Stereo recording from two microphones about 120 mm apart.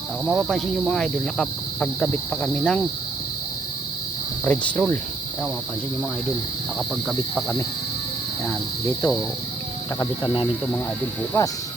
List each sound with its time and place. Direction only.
0.3 s speech: 5° right (ahead or behind)
4.4 s cricket: 10° left (ahead or behind)
8.9 s speech: 25° left (ahead or behind)
11.3 s speech: 20° left (ahead or behind)